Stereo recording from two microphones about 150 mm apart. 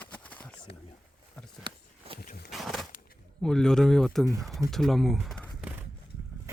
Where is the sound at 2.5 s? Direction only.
Centre (ahead or behind).